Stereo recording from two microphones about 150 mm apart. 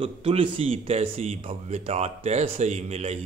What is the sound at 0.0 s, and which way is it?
Speech, 40° right (ahead or behind).